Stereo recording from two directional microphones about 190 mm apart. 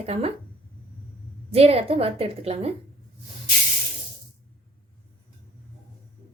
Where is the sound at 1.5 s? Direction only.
30° right (ahead or behind).